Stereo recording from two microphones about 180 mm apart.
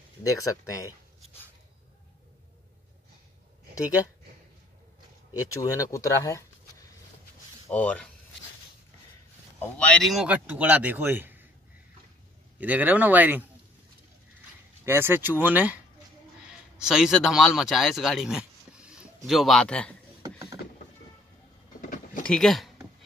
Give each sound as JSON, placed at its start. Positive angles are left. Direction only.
{"t": 0.2, "sound": "speech", "side_deg": 20}
{"t": 5.5, "sound": "speech", "side_deg": 20}
{"t": 7.7, "sound": "speech", "side_deg": 10}
{"t": 9.6, "sound": "speech", "side_deg": 5}
{"t": 12.5, "sound": "speech", "side_deg": -10}
{"t": 14.9, "sound": "speech", "side_deg": -10}
{"t": 20.2, "sound": "a sound", "side_deg": -15}
{"t": 21.8, "sound": "vehicle", "side_deg": 45}
{"t": 22.2, "sound": "speech", "side_deg": 5}